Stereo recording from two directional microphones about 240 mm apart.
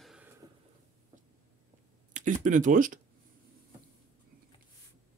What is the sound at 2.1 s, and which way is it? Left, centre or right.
Speech, right.